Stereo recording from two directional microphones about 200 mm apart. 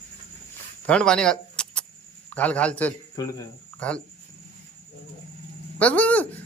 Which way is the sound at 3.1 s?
15° left (ahead or behind).